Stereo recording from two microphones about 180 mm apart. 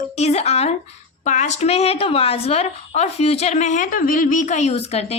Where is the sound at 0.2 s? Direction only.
35° left (ahead or behind).